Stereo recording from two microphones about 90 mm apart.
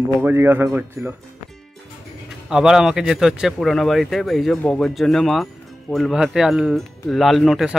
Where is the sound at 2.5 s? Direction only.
5° right (ahead or behind).